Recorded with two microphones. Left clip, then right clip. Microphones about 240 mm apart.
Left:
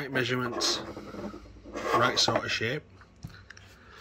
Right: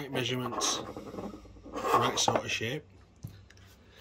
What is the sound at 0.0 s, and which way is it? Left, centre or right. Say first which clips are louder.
Speech: left 4 dB; left.